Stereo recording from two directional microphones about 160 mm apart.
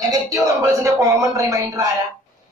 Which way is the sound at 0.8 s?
20° right (ahead or behind).